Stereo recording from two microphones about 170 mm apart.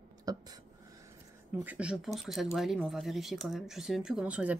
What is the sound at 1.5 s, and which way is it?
Speech, 10° right (ahead or behind).